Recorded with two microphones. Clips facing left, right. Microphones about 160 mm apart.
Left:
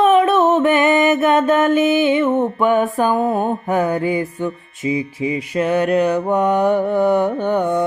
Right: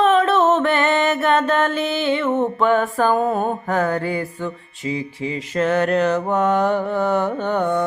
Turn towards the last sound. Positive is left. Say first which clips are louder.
# left 2 dB
turn(degrees=15)  # may be behind; listen again after turning